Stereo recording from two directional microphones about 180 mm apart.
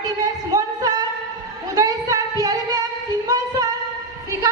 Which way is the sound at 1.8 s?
20° right (ahead or behind).